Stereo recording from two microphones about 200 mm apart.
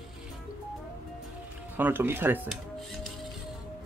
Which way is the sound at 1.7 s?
10° right (ahead or behind).